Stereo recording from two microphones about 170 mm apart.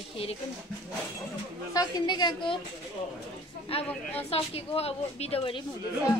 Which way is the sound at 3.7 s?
35° left (ahead or behind).